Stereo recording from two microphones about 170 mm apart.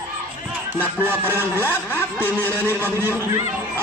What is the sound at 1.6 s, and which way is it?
Speech, 10° left (ahead or behind).